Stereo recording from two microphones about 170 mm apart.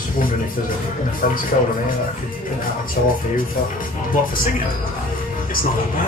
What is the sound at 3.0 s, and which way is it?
Speech, 55° left (ahead or behind).